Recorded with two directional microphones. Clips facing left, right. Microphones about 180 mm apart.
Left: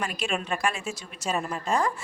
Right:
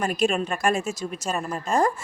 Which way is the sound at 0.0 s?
45° right (ahead or behind).